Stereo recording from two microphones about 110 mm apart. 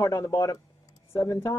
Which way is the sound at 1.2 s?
20° left (ahead or behind).